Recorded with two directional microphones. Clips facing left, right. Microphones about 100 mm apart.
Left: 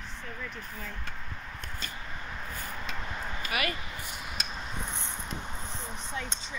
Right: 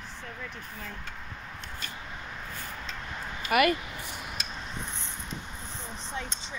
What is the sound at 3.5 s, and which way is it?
Speech, 55° right (ahead or behind).